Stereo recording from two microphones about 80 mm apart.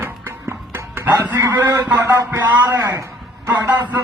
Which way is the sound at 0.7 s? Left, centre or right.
Right.